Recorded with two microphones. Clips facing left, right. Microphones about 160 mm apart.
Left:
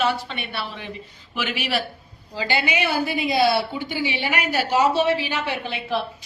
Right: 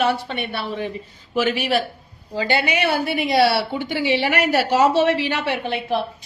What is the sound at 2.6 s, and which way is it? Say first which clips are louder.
A woman's voice: right 2 dB; 60° right (ahead or behind).